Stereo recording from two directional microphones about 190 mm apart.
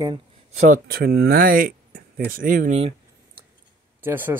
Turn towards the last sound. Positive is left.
turn(degrees=-10)  # may be behind; listen again after turning